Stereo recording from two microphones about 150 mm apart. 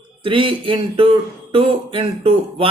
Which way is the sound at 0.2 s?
35° right (ahead or behind).